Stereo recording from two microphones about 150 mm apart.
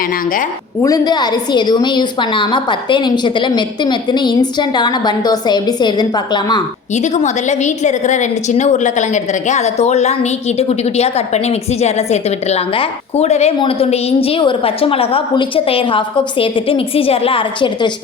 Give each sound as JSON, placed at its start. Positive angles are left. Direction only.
{"t": 0.8, "sound": "a woman's voice", "side_deg": 25}
{"t": 6.9, "sound": "a woman's voice", "side_deg": 50}